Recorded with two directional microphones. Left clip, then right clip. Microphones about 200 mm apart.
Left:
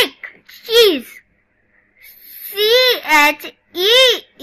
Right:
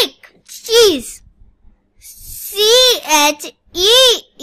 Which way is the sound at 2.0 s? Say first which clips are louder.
Right 5 dB; 70° right (ahead or behind).